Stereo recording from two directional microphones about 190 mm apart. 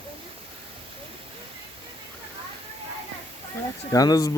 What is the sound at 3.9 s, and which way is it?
Speech, 20° left (ahead or behind).